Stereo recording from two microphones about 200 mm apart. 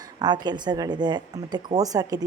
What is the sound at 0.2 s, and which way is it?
Speech, 20° right (ahead or behind).